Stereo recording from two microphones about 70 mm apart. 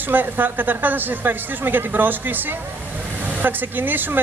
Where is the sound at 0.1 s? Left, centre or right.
Right.